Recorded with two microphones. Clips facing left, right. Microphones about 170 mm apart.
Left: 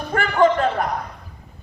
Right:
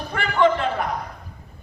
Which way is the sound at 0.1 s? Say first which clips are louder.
Left 2 dB; 45° left (ahead or behind).